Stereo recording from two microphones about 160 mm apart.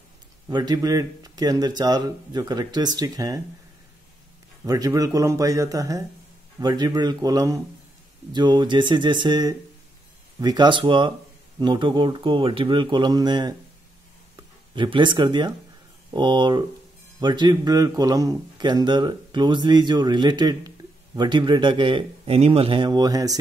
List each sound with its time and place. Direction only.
0.5 s a man's voice: 25° right (ahead or behind)
4.6 s a man's voice: 25° right (ahead or behind)